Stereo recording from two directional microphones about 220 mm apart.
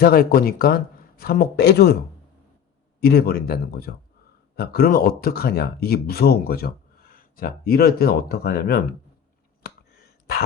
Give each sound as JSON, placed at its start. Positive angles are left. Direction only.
{"t": 0.0, "sound": "speech", "side_deg": 45}
{"t": 3.0, "sound": "speech", "side_deg": 45}
{"t": 9.6, "sound": "a sound", "side_deg": 45}